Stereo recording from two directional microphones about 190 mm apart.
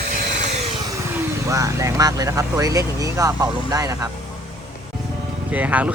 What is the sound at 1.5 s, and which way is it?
Speech, 15° right (ahead or behind).